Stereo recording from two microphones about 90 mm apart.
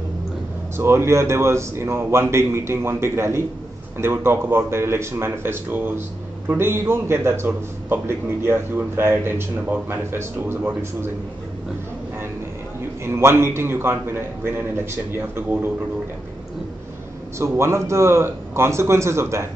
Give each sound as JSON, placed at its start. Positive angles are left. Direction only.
{"t": 0.7, "sound": "speech", "side_deg": -30}
{"t": 13.0, "sound": "speech", "side_deg": -30}
{"t": 17.4, "sound": "a man's voice", "side_deg": -30}